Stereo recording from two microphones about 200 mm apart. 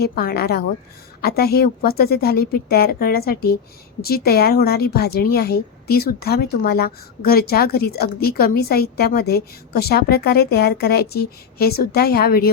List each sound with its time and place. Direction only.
0.0 s a woman's voice: 50° left (ahead or behind)